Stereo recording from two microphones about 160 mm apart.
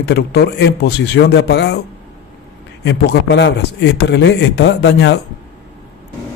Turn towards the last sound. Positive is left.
turn(degrees=90)